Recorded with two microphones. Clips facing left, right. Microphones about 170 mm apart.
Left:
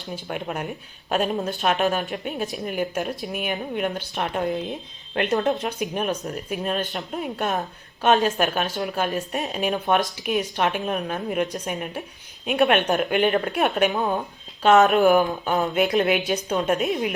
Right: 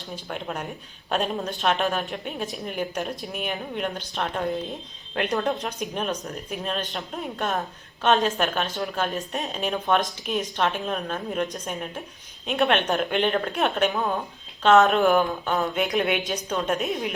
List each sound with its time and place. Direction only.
0.3 s a woman's voice: 5° left (ahead or behind)